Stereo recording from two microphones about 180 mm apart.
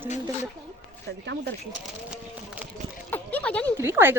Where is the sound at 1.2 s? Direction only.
75° right (ahead or behind).